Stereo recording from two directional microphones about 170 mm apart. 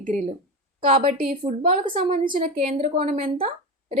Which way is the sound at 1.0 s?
55° right (ahead or behind).